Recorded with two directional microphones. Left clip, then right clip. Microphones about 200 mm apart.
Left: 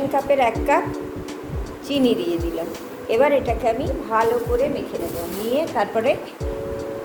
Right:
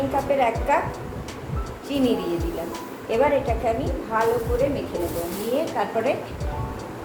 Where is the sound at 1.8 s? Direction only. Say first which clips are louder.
Left 3 dB; 45° left (ahead or behind).